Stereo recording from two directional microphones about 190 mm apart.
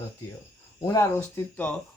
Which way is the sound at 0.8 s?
15° left (ahead or behind).